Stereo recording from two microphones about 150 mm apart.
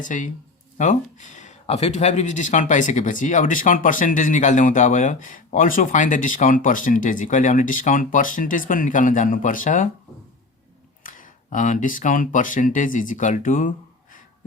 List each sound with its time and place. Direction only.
0.0 s speech: 60° left (ahead or behind)
11.0 s speech: 60° left (ahead or behind)